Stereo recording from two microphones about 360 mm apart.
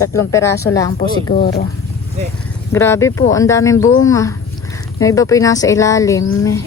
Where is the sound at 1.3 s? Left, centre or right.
Left.